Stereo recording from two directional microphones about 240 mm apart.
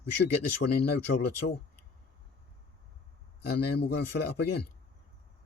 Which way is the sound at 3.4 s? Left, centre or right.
Left.